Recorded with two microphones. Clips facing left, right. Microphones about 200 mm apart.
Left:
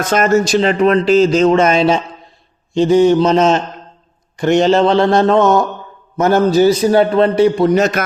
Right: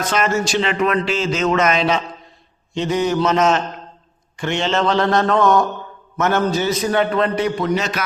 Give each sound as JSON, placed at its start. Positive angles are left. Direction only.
{"t": 0.1, "sound": "speech", "side_deg": 45}
{"t": 4.4, "sound": "speech", "side_deg": 40}
{"t": 7.7, "sound": "a man's voice", "side_deg": 50}